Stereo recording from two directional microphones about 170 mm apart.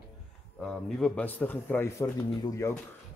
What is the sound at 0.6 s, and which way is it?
Speech, 5° left (ahead or behind).